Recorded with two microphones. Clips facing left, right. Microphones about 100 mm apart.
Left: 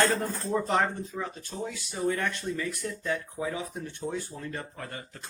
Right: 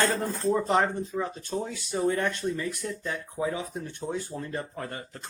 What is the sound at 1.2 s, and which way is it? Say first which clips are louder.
Speech: right 2 dB; 35° right (ahead or behind).